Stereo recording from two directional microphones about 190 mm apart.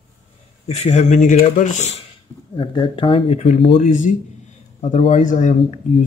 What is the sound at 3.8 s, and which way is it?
Speech, 45° left (ahead or behind).